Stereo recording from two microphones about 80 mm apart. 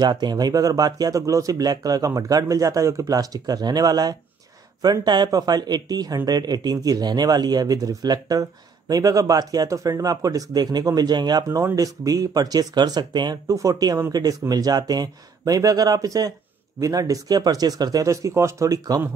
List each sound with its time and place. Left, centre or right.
0.0 s speech: right
11.4 s speech: right
13.5 s speech: right
18.0 s speech: right